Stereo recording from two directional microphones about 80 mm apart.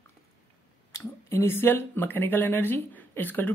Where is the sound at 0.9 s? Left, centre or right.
Left.